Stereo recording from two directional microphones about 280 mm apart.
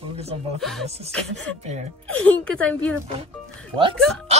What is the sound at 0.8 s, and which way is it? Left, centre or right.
Speech, right.